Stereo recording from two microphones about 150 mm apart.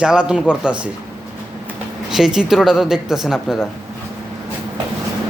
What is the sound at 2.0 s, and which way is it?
A man's voice, 5° right (ahead or behind).